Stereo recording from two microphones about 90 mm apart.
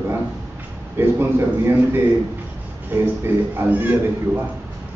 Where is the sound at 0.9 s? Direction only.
25° right (ahead or behind).